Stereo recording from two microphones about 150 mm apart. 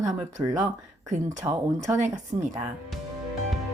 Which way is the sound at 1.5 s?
20° right (ahead or behind).